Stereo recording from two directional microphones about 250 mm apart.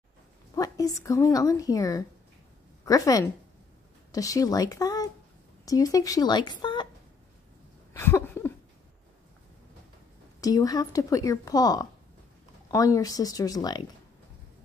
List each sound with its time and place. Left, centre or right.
0.6 s a woman's voice: centre
7.9 s a sound: centre
10.4 s speech: centre